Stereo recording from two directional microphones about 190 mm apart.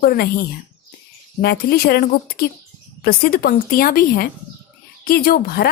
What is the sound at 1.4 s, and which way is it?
Speech, 55° left (ahead or behind).